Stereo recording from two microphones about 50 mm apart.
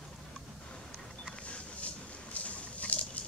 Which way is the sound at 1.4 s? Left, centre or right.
Left.